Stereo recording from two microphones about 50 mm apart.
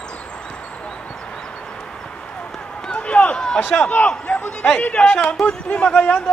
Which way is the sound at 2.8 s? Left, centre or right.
Left.